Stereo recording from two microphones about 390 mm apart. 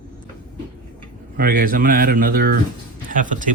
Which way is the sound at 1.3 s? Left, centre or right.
Right.